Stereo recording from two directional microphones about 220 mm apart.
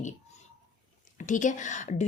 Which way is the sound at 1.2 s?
35° left (ahead or behind).